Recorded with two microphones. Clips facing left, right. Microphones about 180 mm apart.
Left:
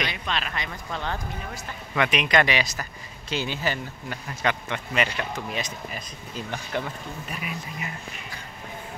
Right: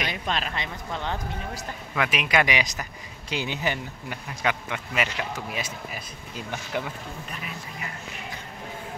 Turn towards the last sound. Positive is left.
turn(degrees=15)  # may be behind; listen again after turning